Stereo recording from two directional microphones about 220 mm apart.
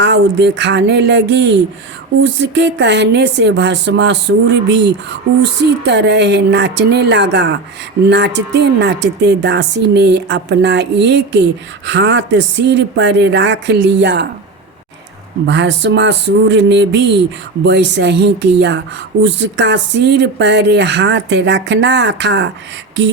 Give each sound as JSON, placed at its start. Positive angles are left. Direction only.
{"t": 0.0, "sound": "a woman's voice", "side_deg": -50}
{"t": 15.4, "sound": "a woman's voice", "side_deg": -55}